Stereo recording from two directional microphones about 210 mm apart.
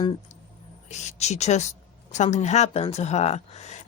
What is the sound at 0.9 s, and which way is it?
Speech, 35° left (ahead or behind).